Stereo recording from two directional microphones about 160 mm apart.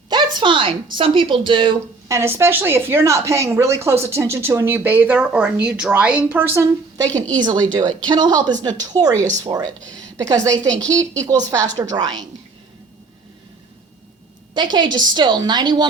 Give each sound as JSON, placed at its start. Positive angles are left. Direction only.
{"t": 0.1, "sound": "a woman's voice", "side_deg": -30}
{"t": 2.0, "sound": "a woman's voice", "side_deg": -15}
{"t": 14.5, "sound": "a woman's voice", "side_deg": -30}